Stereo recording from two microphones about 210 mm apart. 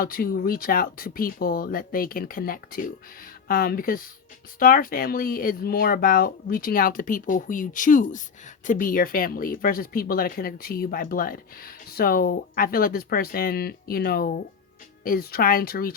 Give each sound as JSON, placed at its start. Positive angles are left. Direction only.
{"t": 0.0, "sound": "speech", "side_deg": 45}